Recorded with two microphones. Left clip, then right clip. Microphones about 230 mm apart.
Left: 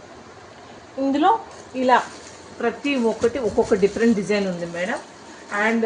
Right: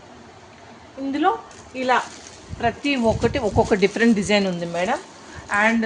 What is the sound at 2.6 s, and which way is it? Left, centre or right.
Speech, right.